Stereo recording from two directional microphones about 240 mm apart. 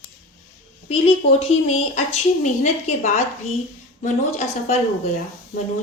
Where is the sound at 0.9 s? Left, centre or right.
Left.